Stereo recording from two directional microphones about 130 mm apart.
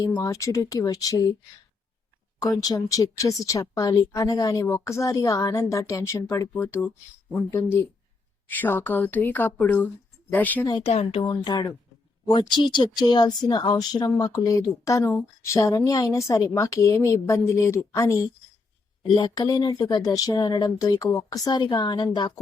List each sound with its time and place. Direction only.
0.0 s speech: 25° left (ahead or behind)
2.4 s speech: 30° left (ahead or behind); by 10.7 s 15° left (ahead or behind)
10.8 s speech: 50° left (ahead or behind)
11.2 s speech: 35° left (ahead or behind)